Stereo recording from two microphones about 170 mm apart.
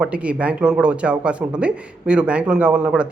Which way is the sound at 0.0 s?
5° right (ahead or behind).